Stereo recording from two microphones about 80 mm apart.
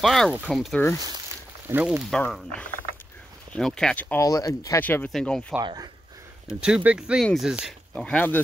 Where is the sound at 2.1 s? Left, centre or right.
Centre.